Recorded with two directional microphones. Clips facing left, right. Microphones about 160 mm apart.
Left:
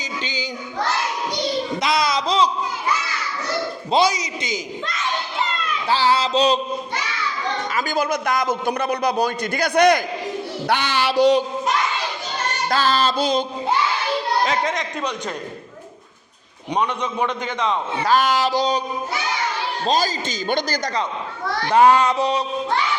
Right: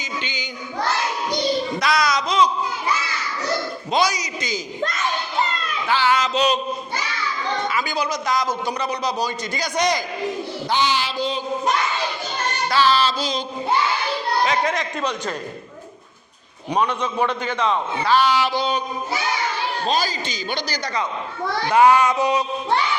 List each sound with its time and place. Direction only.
0.2 s child singing: 35° left (ahead or behind)
1.8 s speech: 25° left (ahead or behind)
3.9 s speech: 25° left (ahead or behind)
5.9 s a sound: 35° left (ahead or behind)
7.7 s a man's voice: 45° left (ahead or behind); by 11.4 s 75° left (ahead or behind)
12.7 s speech: 45° left (ahead or behind)
14.7 s a man's voice: 15° left (ahead or behind)
16.7 s a man's voice: 15° left (ahead or behind)
18.0 s a sound: 45° left (ahead or behind)
19.9 s speech: 40° left (ahead or behind)
21.8 s a sound: 35° left (ahead or behind)